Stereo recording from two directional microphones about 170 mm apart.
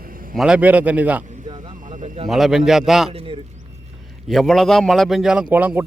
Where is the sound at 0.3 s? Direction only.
5° right (ahead or behind).